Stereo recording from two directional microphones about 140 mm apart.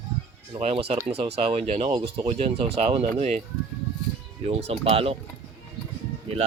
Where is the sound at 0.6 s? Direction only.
50° right (ahead or behind).